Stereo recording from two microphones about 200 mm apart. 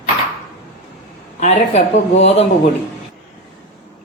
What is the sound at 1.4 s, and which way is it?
Speech, 35° left (ahead or behind).